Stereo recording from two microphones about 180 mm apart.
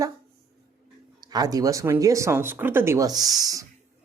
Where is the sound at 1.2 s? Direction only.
20° right (ahead or behind).